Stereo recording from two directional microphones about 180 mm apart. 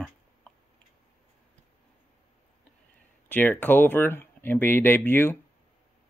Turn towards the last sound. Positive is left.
turn(degrees=10)  # may be behind; listen again after turning